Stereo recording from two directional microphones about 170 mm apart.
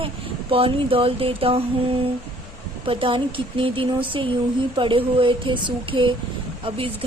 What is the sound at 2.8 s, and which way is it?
Speech, 30° right (ahead or behind).